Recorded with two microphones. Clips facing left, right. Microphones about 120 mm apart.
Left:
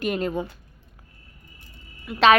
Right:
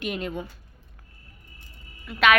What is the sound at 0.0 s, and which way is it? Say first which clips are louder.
Speech: left 5 dB; 40° left (ahead or behind).